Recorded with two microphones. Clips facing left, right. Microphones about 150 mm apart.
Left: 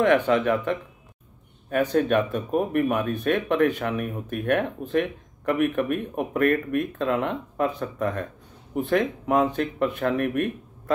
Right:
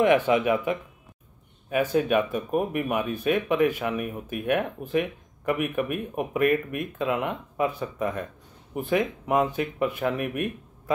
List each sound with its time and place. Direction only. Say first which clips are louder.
0.0 s speech: left 1 dB; 10° right (ahead or behind)